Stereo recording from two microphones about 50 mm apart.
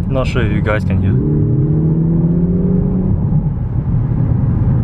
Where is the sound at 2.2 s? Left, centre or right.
Centre.